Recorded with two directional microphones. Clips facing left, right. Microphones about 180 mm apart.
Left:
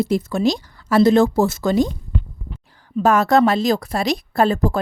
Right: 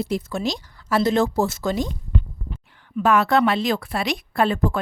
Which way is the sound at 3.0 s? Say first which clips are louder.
Left 3 dB; 40° left (ahead or behind).